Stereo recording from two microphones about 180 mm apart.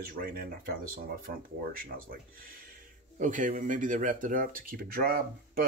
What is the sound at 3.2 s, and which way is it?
Speech, 45° right (ahead or behind).